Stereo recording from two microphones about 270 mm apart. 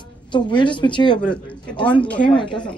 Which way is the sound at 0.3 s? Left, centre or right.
Centre.